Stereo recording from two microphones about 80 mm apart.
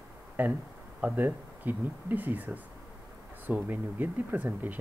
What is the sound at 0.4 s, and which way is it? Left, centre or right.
Speech, right.